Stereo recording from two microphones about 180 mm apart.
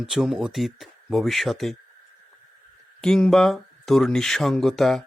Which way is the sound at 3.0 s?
5° left (ahead or behind).